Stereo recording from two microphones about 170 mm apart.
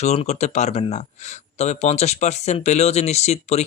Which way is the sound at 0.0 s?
40° left (ahead or behind).